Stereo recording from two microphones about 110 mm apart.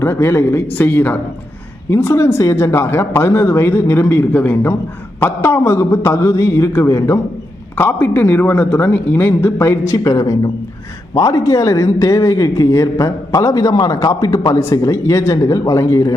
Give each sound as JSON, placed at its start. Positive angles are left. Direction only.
{"t": 0.0, "sound": "speech", "side_deg": 25}